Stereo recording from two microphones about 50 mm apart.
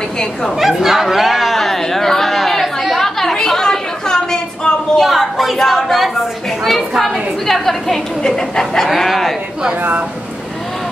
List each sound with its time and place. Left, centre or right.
0.6 s a sound: centre
5.0 s a woman's voice: centre
9.8 s a woman's voice: right